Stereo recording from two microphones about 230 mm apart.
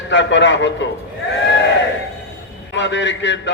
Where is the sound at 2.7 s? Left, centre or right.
Left.